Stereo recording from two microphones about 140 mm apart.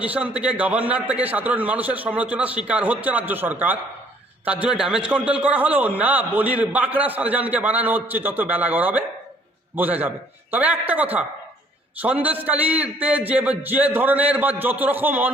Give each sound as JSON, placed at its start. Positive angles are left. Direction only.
{"t": 0.0, "sound": "a man's voice", "side_deg": -10}